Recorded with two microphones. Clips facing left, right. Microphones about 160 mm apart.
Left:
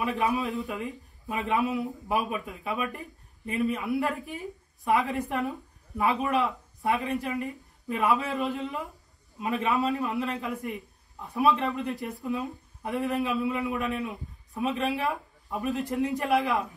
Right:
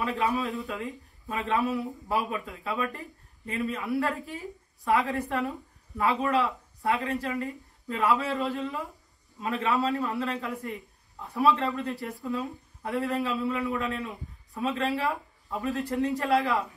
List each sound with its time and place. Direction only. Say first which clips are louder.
0.0 s a man's voice: left 1 dB; 15° left (ahead or behind)